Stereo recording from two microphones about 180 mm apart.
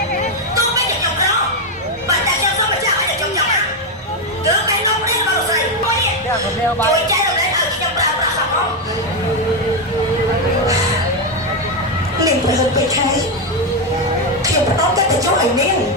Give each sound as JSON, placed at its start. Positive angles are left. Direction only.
{"t": 6.7, "sound": "speech", "side_deg": -20}